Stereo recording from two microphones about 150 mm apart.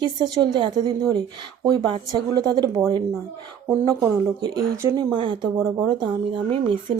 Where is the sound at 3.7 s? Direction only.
20° right (ahead or behind).